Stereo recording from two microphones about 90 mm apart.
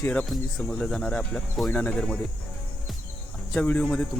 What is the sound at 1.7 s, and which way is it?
Speech, 20° left (ahead or behind).